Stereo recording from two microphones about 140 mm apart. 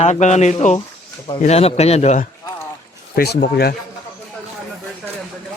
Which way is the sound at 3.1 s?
90° left.